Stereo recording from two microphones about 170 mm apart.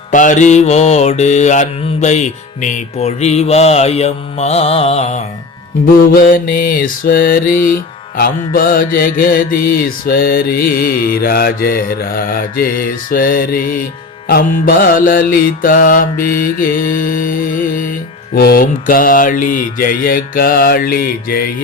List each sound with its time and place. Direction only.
0.1 s mantra: 50° left (ahead or behind)
5.8 s mantra: 55° left (ahead or behind)